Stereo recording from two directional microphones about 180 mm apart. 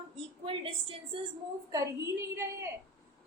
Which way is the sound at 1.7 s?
15° right (ahead or behind).